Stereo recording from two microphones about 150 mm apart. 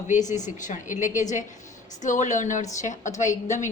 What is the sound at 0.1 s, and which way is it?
A woman's voice, 55° left (ahead or behind).